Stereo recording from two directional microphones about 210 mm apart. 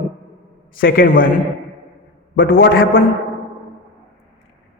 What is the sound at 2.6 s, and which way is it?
Speech, 45° left (ahead or behind).